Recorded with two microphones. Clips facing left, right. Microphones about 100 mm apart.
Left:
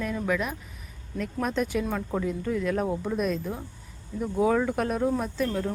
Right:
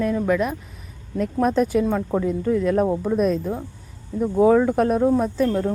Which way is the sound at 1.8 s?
20° right (ahead or behind).